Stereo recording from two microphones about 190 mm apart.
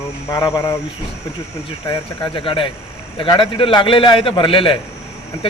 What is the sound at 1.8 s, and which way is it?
A man's voice, 25° left (ahead or behind).